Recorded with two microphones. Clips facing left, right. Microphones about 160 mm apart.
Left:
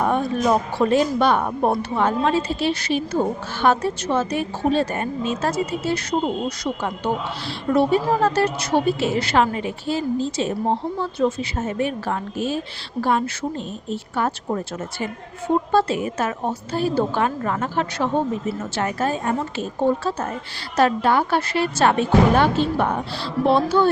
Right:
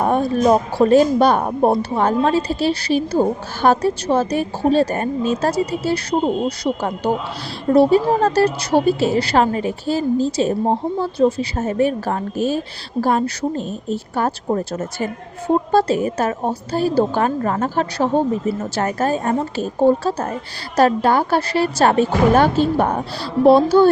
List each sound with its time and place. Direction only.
0.0 s a woman's voice: 35° right (ahead or behind)
7.7 s a woman's voice: 35° right (ahead or behind)